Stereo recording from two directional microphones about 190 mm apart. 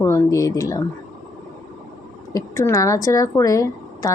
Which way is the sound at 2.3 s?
15° left (ahead or behind).